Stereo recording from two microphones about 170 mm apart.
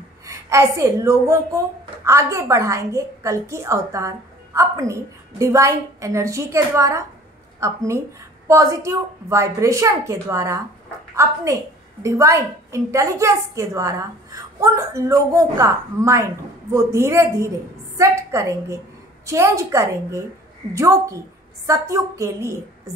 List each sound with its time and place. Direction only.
0.3 s a woman's voice: 15° right (ahead or behind)